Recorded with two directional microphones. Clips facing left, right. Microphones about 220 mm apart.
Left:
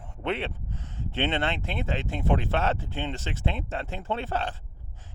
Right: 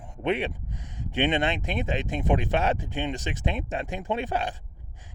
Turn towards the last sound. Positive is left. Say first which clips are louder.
# right 2 dB
turn(degrees=-15)  # may be behind; listen again after turning